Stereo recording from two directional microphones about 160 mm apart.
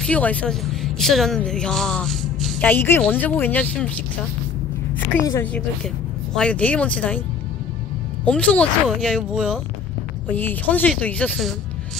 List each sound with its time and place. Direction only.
0.0 s a woman's voice: 10° left (ahead or behind)
5.2 s a woman's voice: 20° left (ahead or behind)
6.3 s a woman's voice: 5° left (ahead or behind)
8.3 s a woman's voice: 5° left (ahead or behind)
10.2 s a woman's voice: 10° left (ahead or behind)